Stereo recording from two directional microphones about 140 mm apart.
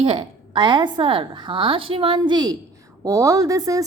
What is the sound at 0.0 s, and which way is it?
A woman's voice, 40° right (ahead or behind).